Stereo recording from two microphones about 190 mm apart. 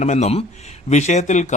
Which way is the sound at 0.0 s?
40° left (ahead or behind).